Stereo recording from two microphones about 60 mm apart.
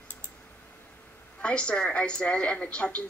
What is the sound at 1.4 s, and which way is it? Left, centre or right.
A woman's voice, centre.